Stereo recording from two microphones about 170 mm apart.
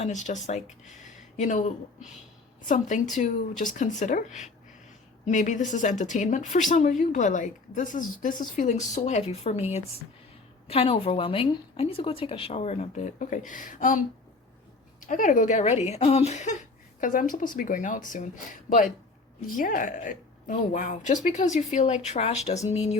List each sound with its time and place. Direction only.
0.0 s a woman's voice: 45° left (ahead or behind)
0.9 s a sound: 45° left (ahead or behind)
2.6 s a woman's voice: 45° left (ahead or behind)
15.0 s a woman's voice: 50° left (ahead or behind)
19.5 s a woman's voice: 50° left (ahead or behind)